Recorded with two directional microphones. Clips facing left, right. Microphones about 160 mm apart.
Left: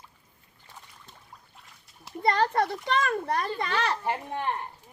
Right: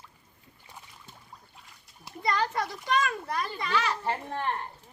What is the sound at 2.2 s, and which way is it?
A child's voice, 55° left (ahead or behind).